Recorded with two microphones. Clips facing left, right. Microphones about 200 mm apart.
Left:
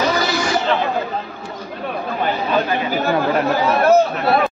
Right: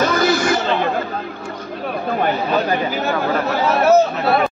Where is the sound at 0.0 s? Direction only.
50° right (ahead or behind).